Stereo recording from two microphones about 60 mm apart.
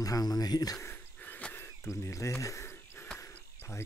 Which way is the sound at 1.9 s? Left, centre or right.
Left.